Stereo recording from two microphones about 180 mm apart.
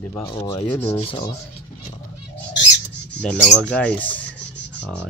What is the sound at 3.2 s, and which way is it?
Speech, 5° left (ahead or behind).